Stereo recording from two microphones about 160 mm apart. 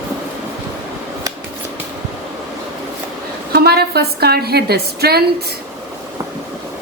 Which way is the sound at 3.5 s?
80° right.